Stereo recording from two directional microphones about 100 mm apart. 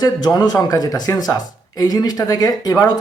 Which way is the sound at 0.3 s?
40° left (ahead or behind).